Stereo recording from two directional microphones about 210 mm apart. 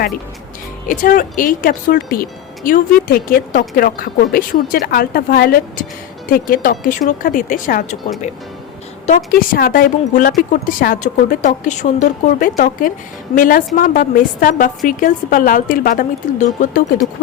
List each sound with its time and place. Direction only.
0.9 s a woman's voice: 40° left (ahead or behind)